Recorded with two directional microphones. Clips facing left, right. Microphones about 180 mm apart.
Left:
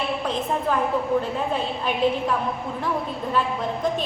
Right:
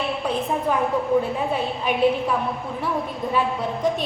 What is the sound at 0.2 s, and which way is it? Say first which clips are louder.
Speech: right 4 dB; 10° right (ahead or behind).